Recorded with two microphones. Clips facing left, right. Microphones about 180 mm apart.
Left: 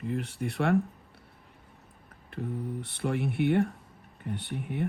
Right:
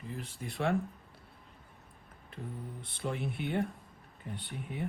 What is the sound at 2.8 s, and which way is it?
Speech, 65° left (ahead or behind).